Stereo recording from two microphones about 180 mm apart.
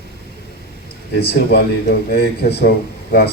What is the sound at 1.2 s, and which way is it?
Speech, 60° left (ahead or behind).